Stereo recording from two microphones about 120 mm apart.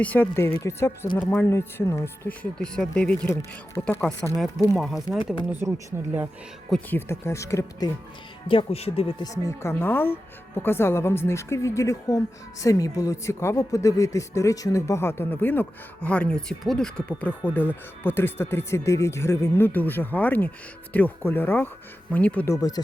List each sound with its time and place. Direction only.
0.0 s speech: 15° left (ahead or behind)
2.4 s speech: 5° left (ahead or behind)
4.8 s speech: centre (ahead or behind)
5.2 s speech: 45° left (ahead or behind)
6.9 s speech: 20° left (ahead or behind)
8.4 s speech: 50° left (ahead or behind)
9.2 s speech: 25° left (ahead or behind)
22.4 s speech: 30° left (ahead or behind)